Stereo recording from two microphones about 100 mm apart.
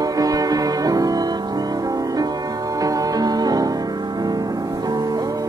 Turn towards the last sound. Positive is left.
turn(degrees=-40)  # may be behind; listen again after turning